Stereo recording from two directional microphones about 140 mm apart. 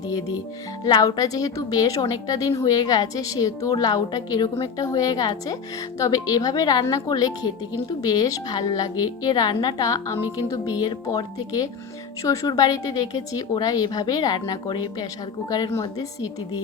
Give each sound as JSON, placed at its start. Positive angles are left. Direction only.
{"t": 0.1, "sound": "a woman's voice", "side_deg": 25}